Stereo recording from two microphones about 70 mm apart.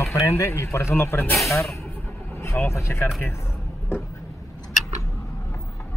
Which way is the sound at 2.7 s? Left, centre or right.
Left.